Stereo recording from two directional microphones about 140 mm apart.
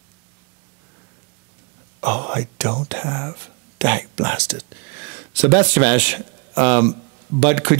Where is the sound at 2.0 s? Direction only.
10° right (ahead or behind).